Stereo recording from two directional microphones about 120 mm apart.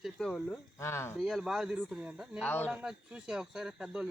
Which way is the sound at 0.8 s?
20° left (ahead or behind).